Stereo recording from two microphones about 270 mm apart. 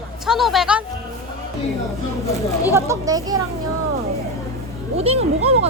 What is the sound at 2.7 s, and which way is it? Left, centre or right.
Speech, centre.